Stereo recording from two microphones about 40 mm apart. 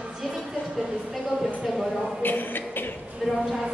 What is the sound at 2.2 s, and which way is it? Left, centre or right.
Speech, left.